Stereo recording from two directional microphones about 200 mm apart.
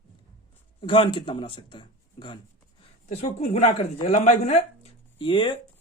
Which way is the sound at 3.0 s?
35° left (ahead or behind).